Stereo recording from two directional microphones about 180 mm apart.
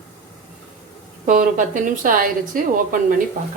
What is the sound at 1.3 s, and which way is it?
A woman's voice, 45° right (ahead or behind).